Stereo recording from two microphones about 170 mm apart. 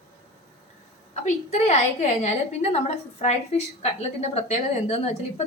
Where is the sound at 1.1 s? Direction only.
40° left (ahead or behind).